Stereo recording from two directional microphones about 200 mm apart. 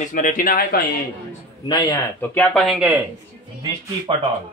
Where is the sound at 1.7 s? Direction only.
15° left (ahead or behind); by 3.0 s 5° right (ahead or behind).